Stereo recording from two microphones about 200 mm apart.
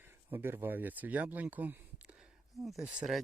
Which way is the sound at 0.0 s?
10° right (ahead or behind).